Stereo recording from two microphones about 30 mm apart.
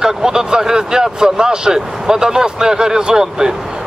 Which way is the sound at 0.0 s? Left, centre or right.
Centre.